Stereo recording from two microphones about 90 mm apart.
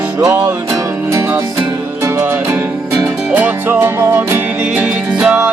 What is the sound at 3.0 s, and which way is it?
Music, 20° right (ahead or behind).